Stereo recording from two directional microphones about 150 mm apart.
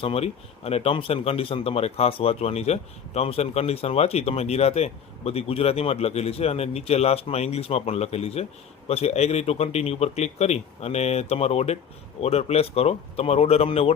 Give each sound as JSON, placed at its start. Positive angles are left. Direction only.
{"t": 0.0, "sound": "speech", "side_deg": 40}